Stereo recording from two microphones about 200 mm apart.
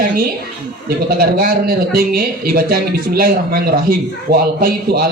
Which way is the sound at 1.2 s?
45° right (ahead or behind).